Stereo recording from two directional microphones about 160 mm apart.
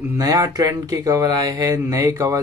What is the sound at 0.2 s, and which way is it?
Speech, 25° right (ahead or behind).